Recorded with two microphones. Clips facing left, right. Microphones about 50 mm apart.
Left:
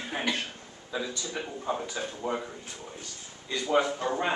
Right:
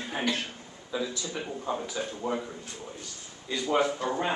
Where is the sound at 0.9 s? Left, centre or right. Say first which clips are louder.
Right 1 dB; centre.